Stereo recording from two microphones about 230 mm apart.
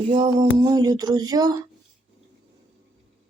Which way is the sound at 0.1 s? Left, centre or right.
Centre.